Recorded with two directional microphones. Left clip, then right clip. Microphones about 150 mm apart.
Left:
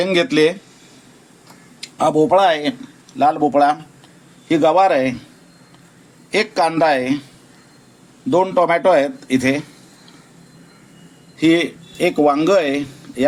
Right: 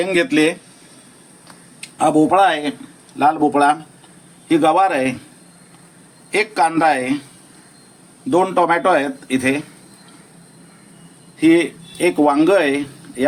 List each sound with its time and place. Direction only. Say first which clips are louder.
0.0 s a man's voice: left 1 dB; 40° left (ahead or behind)
1.8 s a man's voice: even; 30° left (ahead or behind)
6.3 s a man's voice: even; 35° left (ahead or behind)
8.3 s a man's voice: even; 25° left (ahead or behind)
11.3 s speech: right 1 dB; 40° left (ahead or behind)